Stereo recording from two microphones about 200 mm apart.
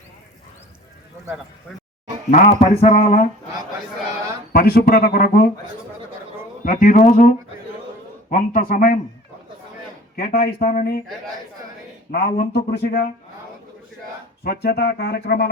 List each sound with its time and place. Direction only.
2.3 s speech: 35° left (ahead or behind)
4.5 s speech: 50° left (ahead or behind)
6.7 s speech: 40° left (ahead or behind)
10.2 s speech: 50° left (ahead or behind)
12.1 s speech: 55° left (ahead or behind)
14.4 s speech: 55° left (ahead or behind)